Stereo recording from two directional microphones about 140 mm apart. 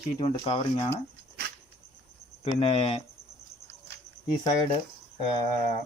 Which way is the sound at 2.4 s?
45° left (ahead or behind).